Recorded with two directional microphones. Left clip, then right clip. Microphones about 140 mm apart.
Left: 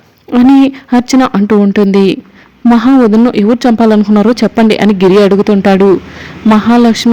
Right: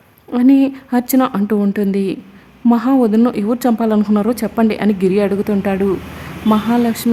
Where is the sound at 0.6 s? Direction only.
30° left (ahead or behind).